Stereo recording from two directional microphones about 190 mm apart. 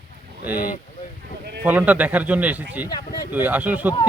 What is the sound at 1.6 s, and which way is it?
Speech, 10° right (ahead or behind).